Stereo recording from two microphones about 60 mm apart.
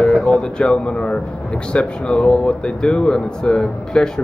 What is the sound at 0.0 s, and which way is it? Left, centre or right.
Speech, centre.